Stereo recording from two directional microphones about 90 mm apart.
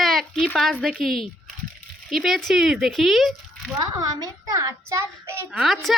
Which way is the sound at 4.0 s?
40° right (ahead or behind).